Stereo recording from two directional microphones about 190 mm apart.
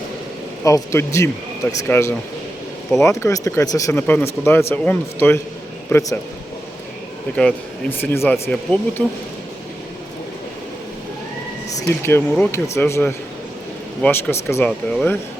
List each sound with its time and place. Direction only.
0.6 s speech: 15° left (ahead or behind)
7.3 s speech: 10° left (ahead or behind)
11.8 s speech: 15° left (ahead or behind)